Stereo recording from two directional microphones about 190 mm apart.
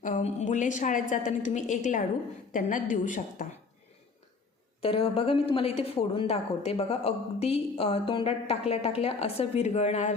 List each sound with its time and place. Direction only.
0.0 s a woman's voice: 40° left (ahead or behind)
4.8 s a woman's voice: 30° left (ahead or behind)